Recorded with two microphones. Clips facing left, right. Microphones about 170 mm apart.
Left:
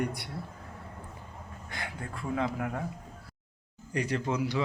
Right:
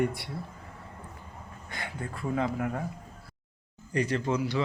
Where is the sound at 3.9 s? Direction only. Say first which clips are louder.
Right 2 dB; 10° left (ahead or behind).